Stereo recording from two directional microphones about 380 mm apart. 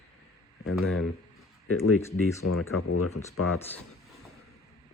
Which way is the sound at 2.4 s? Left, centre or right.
Left.